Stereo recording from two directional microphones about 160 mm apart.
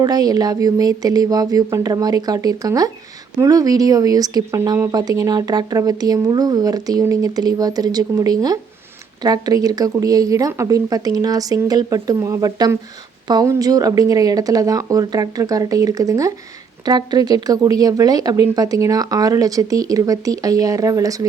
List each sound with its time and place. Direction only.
0.0 s speech: 25° right (ahead or behind)